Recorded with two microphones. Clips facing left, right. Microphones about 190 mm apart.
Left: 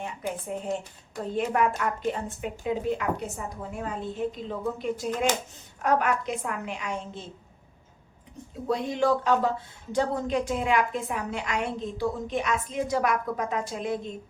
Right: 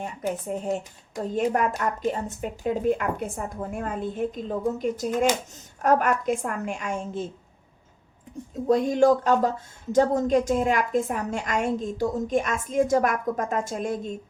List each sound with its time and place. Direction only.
0.0 s speech: 40° right (ahead or behind)
8.6 s speech: 45° right (ahead or behind)